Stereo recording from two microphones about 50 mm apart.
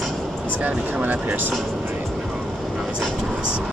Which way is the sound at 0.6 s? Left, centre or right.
Right.